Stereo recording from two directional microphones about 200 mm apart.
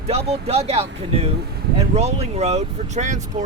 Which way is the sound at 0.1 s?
30° right (ahead or behind).